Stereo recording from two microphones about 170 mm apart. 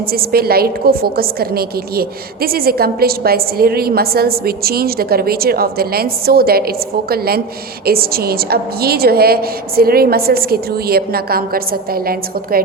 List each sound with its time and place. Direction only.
0.0 s a woman's voice: 60° right (ahead or behind)